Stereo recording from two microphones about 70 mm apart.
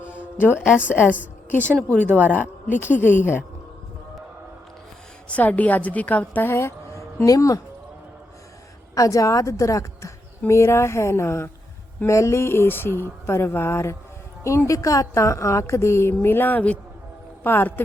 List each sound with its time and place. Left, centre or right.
0.1 s music: left
1.5 s a woman's voice: left
5.3 s a woman's voice: left
7.3 s a woman's voice: left
9.0 s a woman's voice: left